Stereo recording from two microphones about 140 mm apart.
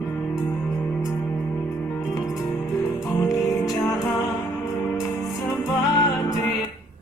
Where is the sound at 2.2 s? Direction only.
25° left (ahead or behind).